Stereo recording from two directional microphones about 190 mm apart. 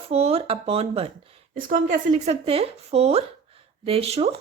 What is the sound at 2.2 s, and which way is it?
Speech, 30° right (ahead or behind).